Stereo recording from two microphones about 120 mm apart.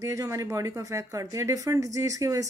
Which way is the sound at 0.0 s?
25° right (ahead or behind).